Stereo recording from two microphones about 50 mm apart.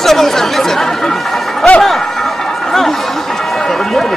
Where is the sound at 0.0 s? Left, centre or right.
Centre.